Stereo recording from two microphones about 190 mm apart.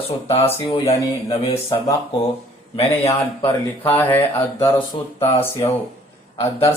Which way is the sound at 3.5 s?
10° left (ahead or behind).